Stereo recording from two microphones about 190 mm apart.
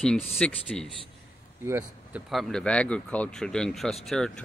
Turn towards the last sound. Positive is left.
turn(degrees=0)  # may be behind; listen again after turning